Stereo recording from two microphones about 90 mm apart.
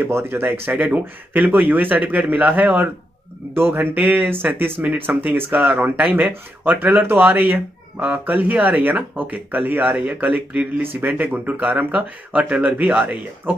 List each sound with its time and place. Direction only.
0.0 s speech: 25° right (ahead or behind)